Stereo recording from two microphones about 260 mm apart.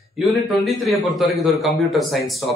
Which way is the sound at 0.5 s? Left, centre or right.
Centre.